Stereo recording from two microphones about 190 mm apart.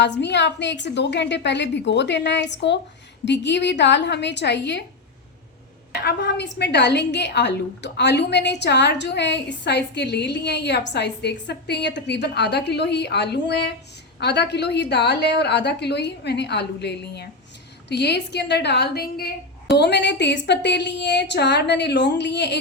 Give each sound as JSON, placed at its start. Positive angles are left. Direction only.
{"t": 0.0, "sound": "a woman's voice", "side_deg": 65}
{"t": 6.0, "sound": "a woman's voice", "side_deg": 60}